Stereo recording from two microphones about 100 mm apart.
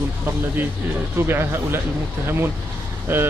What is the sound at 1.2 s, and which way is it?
Speech, 25° right (ahead or behind).